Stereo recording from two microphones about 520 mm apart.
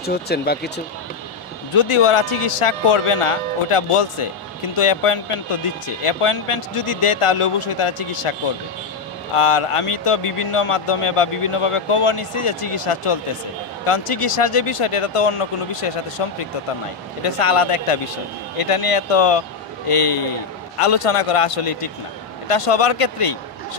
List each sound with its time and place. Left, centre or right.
0.0 s speech: centre
1.8 s a man's voice: left